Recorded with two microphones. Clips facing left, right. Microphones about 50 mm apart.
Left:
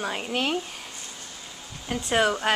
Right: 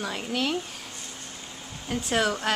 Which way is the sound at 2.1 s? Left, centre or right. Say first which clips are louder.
Left 3 dB; left.